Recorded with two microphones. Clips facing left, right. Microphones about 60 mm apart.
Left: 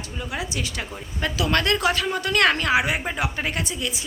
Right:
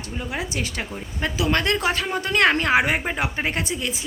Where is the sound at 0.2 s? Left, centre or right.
Right.